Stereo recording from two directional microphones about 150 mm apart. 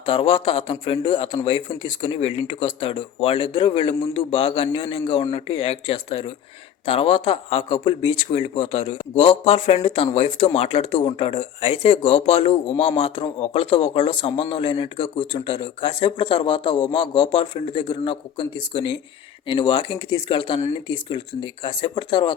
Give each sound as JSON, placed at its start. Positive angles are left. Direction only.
{"t": 0.0, "sound": "a man's voice", "side_deg": 35}